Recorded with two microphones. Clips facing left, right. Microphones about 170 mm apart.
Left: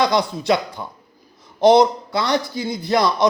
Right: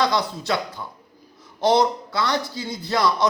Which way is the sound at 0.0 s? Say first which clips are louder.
Left 4 dB; 15° left (ahead or behind).